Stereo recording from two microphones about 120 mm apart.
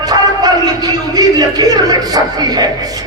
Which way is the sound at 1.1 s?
35° right (ahead or behind).